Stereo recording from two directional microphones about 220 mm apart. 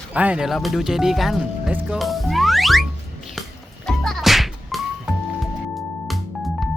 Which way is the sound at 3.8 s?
Centre (ahead or behind).